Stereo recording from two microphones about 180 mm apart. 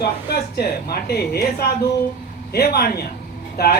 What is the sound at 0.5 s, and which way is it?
A man's voice, 60° left (ahead or behind).